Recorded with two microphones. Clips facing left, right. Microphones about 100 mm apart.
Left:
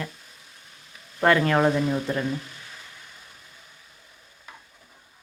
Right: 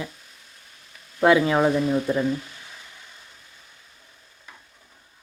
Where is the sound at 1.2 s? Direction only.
5° right (ahead or behind).